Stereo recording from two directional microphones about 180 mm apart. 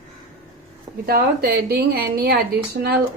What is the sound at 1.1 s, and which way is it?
A woman's voice, 60° right (ahead or behind).